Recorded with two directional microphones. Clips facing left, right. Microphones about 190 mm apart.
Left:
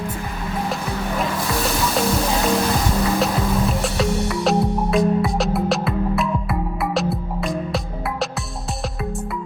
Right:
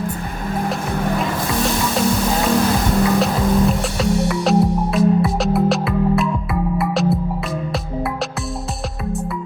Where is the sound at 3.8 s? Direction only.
Centre (ahead or behind).